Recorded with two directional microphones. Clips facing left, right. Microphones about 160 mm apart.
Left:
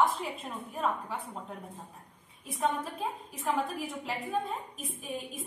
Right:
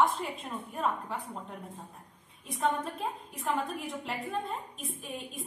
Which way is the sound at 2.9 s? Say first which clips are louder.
Even; centre (ahead or behind).